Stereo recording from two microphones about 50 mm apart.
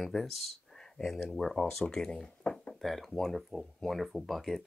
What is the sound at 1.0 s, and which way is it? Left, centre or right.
Speech, centre.